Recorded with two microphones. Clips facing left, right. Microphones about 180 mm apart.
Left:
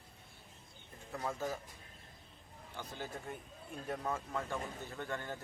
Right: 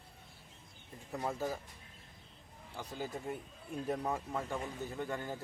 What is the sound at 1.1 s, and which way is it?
Speech, 15° right (ahead or behind).